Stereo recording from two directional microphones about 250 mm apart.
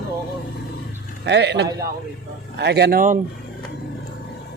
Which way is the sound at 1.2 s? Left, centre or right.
Right.